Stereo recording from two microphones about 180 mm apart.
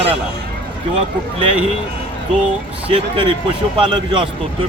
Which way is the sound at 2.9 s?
30° right (ahead or behind).